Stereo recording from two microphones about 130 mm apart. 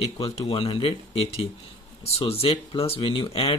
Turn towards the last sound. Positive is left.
turn(degrees=45)  # may be behind; listen again after turning